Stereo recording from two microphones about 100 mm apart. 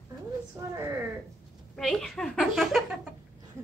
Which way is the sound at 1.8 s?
5° left (ahead or behind).